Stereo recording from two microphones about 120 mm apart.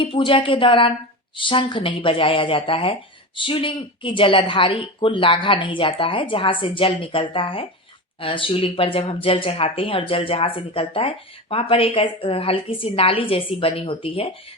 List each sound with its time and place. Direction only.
0.0 s speech: 45° left (ahead or behind)